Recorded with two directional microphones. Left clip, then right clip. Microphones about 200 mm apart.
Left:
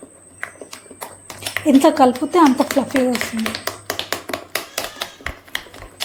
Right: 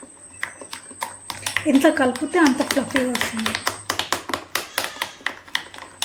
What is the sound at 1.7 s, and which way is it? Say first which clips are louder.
Speech: left 5 dB; 25° left (ahead or behind).